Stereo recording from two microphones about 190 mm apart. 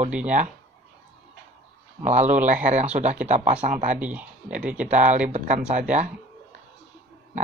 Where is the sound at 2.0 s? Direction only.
40° right (ahead or behind).